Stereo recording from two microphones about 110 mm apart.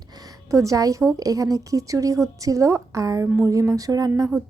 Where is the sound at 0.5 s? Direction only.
30° right (ahead or behind).